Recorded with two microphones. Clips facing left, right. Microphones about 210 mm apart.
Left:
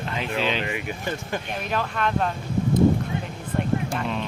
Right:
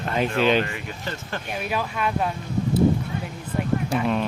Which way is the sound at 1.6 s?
10° right (ahead or behind).